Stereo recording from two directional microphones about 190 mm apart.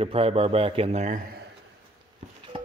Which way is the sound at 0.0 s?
30° right (ahead or behind).